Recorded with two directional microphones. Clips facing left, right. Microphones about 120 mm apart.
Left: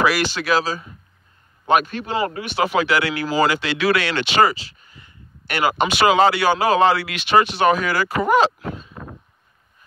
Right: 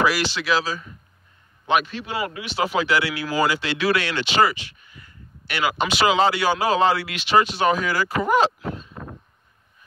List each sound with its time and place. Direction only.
0.0 s speech: 55° left (ahead or behind); by 2.4 s 40° left (ahead or behind)
2.4 s speech: 65° left (ahead or behind)
4.5 s a sound: 35° left (ahead or behind)
5.5 s speech: 50° left (ahead or behind); by 7.2 s 75° left (ahead or behind)
7.2 s speech: 65° left (ahead or behind)